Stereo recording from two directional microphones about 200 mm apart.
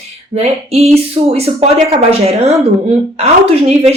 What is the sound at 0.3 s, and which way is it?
Speech, 30° right (ahead or behind).